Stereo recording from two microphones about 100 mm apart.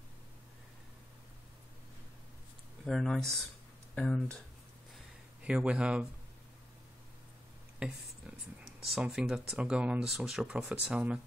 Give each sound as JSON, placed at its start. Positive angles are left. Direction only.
{"t": 2.8, "sound": "speech", "side_deg": 5}
{"t": 5.4, "sound": "speech", "side_deg": -10}
{"t": 7.8, "sound": "speech", "side_deg": -10}